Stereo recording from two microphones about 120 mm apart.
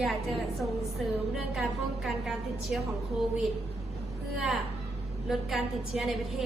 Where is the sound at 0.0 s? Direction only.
Centre (ahead or behind).